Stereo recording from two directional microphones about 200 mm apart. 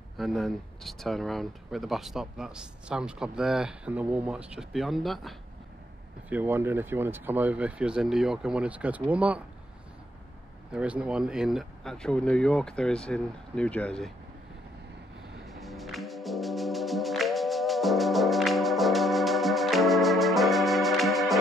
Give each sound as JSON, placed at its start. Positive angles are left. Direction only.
{"t": 0.2, "sound": "speech", "side_deg": 0}
{"t": 10.7, "sound": "speech", "side_deg": -5}
{"t": 15.4, "sound": "music", "side_deg": 0}